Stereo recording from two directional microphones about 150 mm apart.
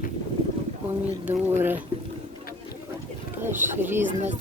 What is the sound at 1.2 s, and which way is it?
Speech, 15° right (ahead or behind).